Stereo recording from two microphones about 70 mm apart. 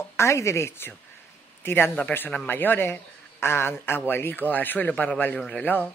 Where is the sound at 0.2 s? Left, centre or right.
Left.